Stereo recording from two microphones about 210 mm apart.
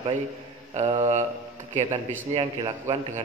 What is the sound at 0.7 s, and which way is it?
Speech, 30° right (ahead or behind).